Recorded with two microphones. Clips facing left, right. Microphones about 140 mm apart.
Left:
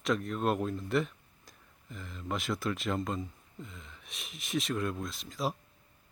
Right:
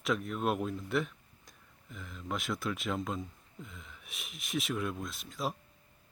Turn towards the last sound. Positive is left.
turn(degrees=0)  # may be behind; listen again after turning